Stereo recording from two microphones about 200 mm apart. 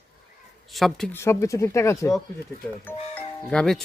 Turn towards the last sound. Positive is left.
turn(degrees=5)  # may be behind; listen again after turning